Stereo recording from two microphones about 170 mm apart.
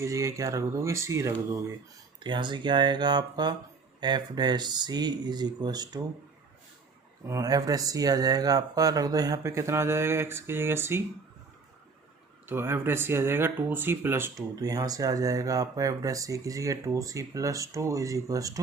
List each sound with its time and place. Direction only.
0.0 s speech: 20° right (ahead or behind)
7.3 s speech: 20° right (ahead or behind)
12.5 s speech: 15° right (ahead or behind)